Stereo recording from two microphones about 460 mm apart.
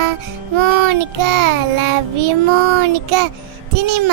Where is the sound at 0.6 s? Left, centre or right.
Right.